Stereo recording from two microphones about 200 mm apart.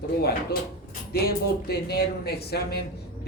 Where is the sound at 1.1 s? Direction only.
50° left (ahead or behind).